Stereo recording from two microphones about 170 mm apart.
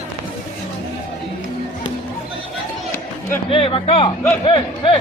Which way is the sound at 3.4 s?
35° left (ahead or behind).